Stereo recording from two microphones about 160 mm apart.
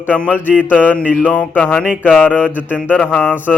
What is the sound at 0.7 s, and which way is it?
Speech, 10° left (ahead or behind).